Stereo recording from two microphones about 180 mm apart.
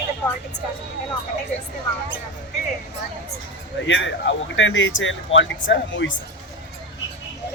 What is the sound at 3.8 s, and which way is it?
Speech, 90° left.